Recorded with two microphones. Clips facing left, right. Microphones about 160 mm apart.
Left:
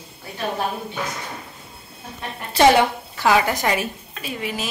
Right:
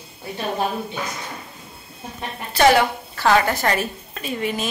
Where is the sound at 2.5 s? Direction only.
25° left (ahead or behind).